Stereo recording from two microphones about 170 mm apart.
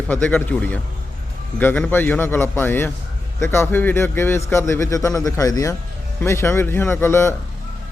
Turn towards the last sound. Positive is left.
turn(degrees=15)  # may be behind; listen again after turning